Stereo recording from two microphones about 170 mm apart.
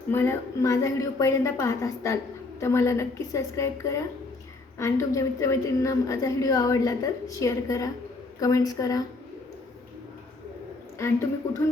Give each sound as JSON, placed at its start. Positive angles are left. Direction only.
{"t": 0.1, "sound": "a woman's voice", "side_deg": 15}
{"t": 10.9, "sound": "a woman's voice", "side_deg": 15}